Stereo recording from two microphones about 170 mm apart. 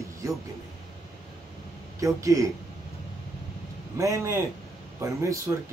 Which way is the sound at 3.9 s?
20° right (ahead or behind).